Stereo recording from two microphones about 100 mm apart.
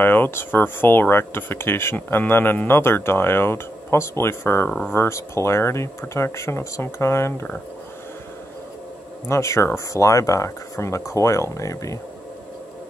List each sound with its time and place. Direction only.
0.0 s speech: 20° left (ahead or behind)
9.3 s speech: 30° left (ahead or behind)